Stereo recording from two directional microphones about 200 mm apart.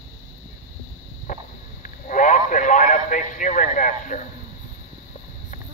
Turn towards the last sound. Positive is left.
turn(degrees=40)  # may be behind; listen again after turning